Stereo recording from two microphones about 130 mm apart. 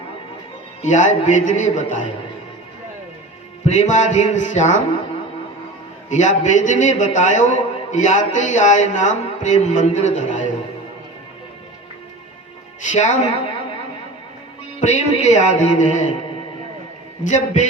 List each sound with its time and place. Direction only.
0.8 s a man's voice: 70° left (ahead or behind)
3.6 s a man's voice: 70° left (ahead or behind)
6.1 s a man's voice: 70° left (ahead or behind)
12.8 s a man's voice: 70° left (ahead or behind)
14.8 s music: 65° left (ahead or behind)
17.2 s a man's voice: 70° left (ahead or behind)